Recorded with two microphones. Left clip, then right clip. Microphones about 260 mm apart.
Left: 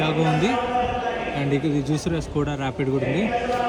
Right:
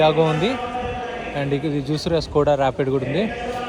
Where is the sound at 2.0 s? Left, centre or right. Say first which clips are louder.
Right 8 dB; right.